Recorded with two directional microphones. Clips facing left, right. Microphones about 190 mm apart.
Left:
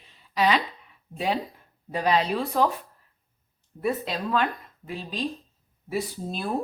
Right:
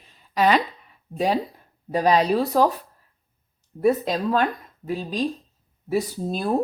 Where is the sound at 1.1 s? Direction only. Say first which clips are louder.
Right 5 dB; 40° right (ahead or behind).